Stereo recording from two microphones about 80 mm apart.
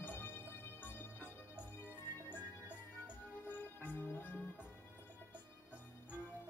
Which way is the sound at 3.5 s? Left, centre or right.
Left.